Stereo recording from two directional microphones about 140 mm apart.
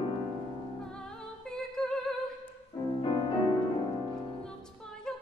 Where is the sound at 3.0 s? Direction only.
35° left (ahead or behind).